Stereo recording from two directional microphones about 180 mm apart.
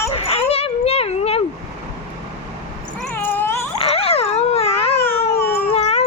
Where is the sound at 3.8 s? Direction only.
35° left (ahead or behind).